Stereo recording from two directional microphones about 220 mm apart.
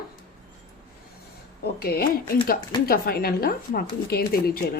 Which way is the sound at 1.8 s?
45° left (ahead or behind).